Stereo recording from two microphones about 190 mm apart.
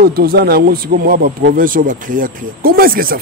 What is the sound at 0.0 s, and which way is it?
A man's voice, 55° right (ahead or behind).